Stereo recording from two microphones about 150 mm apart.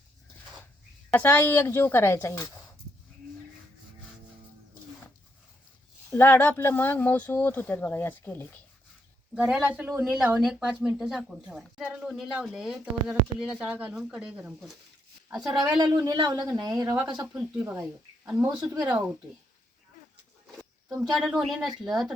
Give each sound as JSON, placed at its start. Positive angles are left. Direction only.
{"t": 1.1, "sound": "speech", "side_deg": 10}
{"t": 6.1, "sound": "speech", "side_deg": 15}
{"t": 9.3, "sound": "speech", "side_deg": -5}
{"t": 16.0, "sound": "speech", "side_deg": -25}
{"t": 17.2, "sound": "speech", "side_deg": -5}
{"t": 18.4, "sound": "speech", "side_deg": -25}
{"t": 18.8, "sound": "speech", "side_deg": -10}
{"t": 20.6, "sound": "speech", "side_deg": 0}